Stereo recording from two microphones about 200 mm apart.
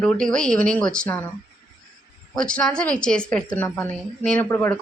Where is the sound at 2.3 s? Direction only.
5° left (ahead or behind).